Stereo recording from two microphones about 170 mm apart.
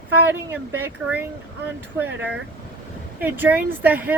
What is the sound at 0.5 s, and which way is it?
Speech, 10° right (ahead or behind).